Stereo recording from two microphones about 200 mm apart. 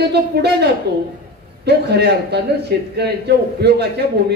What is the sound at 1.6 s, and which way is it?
A man's voice, 55° right (ahead or behind).